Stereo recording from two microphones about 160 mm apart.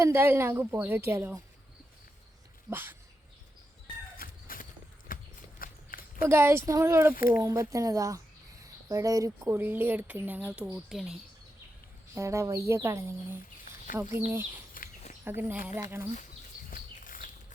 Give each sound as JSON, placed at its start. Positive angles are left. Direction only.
{"t": 0.0, "sound": "speech", "side_deg": -15}
{"t": 2.6, "sound": "speech", "side_deg": -15}
{"t": 4.2, "sound": "a sound", "side_deg": 65}
{"t": 5.0, "sound": "walk", "side_deg": 60}
{"t": 6.2, "sound": "speech", "side_deg": -15}
{"t": 7.1, "sound": "speech", "side_deg": 65}
{"t": 7.4, "sound": "speech", "side_deg": -20}
{"t": 12.1, "sound": "speech", "side_deg": -20}
{"t": 16.6, "sound": "a sound", "side_deg": 60}